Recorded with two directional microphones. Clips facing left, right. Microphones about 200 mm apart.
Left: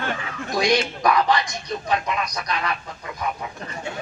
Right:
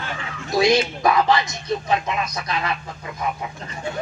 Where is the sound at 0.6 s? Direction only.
25° right (ahead or behind).